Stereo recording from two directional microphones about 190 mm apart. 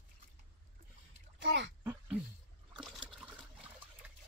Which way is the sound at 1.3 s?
70° right (ahead or behind).